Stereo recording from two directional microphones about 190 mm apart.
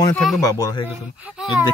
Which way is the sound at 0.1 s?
Centre (ahead or behind).